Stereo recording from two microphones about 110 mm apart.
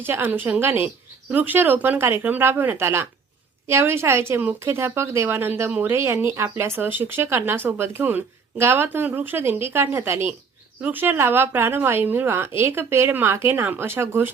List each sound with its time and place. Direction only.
0.0 s speech: 20° right (ahead or behind)